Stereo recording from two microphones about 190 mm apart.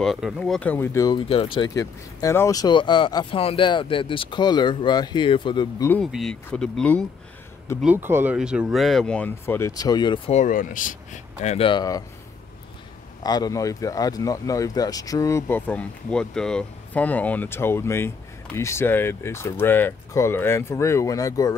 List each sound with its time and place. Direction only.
0.0 s speech: centre (ahead or behind); by 1.7 s 30° left (ahead or behind)
1.7 s speech: 20° left (ahead or behind)
5.9 s speech: 5° left (ahead or behind)
7.8 s speech: 10° right (ahead or behind); by 10.4 s 25° left (ahead or behind)
10.4 s speech: 45° left (ahead or behind)
11.4 s speech: 30° left (ahead or behind)
13.2 s speech: 20° left (ahead or behind)